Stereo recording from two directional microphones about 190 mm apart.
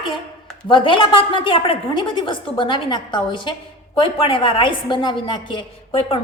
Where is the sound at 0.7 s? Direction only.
25° left (ahead or behind).